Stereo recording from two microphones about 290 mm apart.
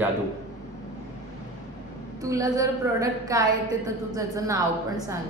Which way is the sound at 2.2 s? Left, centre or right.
Centre.